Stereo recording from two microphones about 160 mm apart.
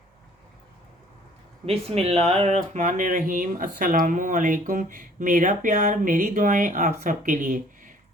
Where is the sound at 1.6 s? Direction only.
40° right (ahead or behind); by 7.9 s 55° right (ahead or behind).